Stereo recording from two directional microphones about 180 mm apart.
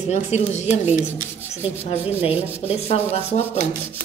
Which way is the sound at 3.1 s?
35° left (ahead or behind).